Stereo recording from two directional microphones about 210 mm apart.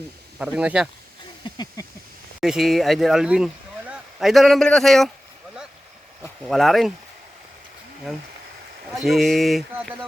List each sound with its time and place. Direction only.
0.3 s speech: 5° right (ahead or behind)
1.5 s a sound: 15° left (ahead or behind)
2.4 s speech: centre (ahead or behind)
6.4 s speech: centre (ahead or behind)
8.1 s speech: centre (ahead or behind)